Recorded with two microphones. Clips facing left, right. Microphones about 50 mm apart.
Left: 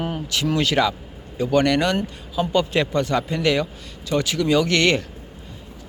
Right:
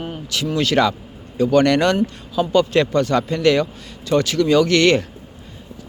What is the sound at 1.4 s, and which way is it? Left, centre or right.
Speech, centre.